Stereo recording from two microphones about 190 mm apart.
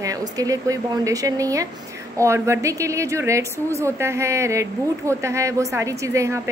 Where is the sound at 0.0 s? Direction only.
20° right (ahead or behind).